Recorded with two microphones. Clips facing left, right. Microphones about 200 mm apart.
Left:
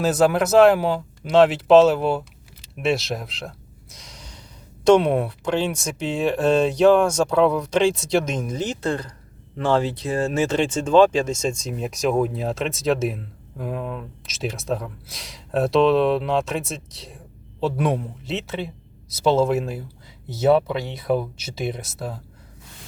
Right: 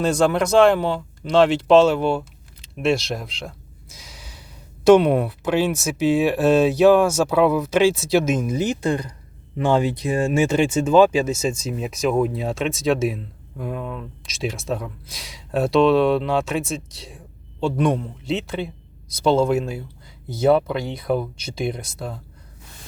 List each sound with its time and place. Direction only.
0.0 s speech: 5° left (ahead or behind)